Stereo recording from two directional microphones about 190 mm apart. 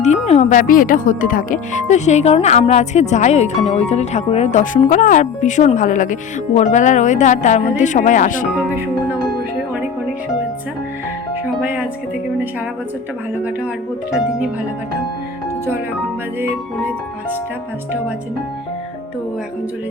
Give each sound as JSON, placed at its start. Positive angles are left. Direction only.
{"t": 0.0, "sound": "speech", "side_deg": 35}
{"t": 8.5, "sound": "speech", "side_deg": -10}
{"t": 11.6, "sound": "speech", "side_deg": -5}